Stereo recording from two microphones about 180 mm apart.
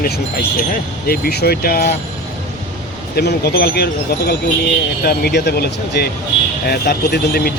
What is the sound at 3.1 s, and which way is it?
Speech, 60° left (ahead or behind).